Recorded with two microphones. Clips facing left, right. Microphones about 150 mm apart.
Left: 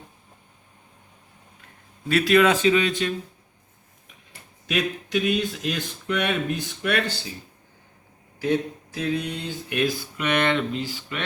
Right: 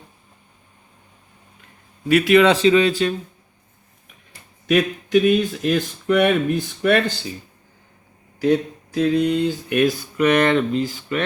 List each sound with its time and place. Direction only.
2.0 s speech: 15° right (ahead or behind)
2.4 s speech: 30° right (ahead or behind)
4.7 s speech: 45° right (ahead or behind)
8.4 s speech: 40° right (ahead or behind)